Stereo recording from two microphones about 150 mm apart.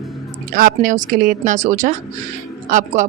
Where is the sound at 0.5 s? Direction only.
70° right (ahead or behind).